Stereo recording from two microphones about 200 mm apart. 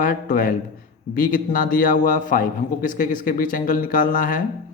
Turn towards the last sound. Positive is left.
turn(degrees=45)  # may be behind; listen again after turning